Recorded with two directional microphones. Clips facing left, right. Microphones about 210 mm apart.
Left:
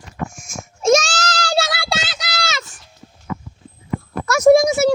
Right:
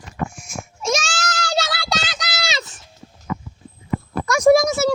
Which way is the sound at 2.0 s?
5° left (ahead or behind).